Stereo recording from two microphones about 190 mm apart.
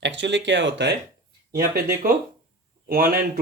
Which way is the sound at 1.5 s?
55° right (ahead or behind).